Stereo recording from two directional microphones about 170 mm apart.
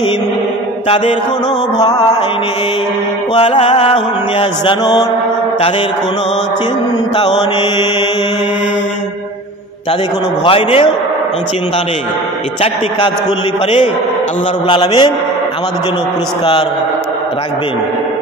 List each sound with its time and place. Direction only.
0.8 s mantra: 35° left (ahead or behind)
1.8 s mantra: 20° left (ahead or behind)
3.3 s mantra: 35° left (ahead or behind)
7.2 s mantra: 25° left (ahead or behind)
10.4 s mantra: 35° left (ahead or behind)
14.7 s mantra: 30° left (ahead or behind)